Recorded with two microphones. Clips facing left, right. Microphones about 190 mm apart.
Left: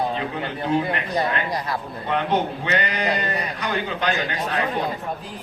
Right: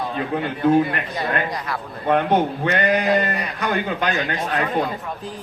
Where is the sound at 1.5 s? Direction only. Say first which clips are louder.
Left 1 dB; 35° left (ahead or behind).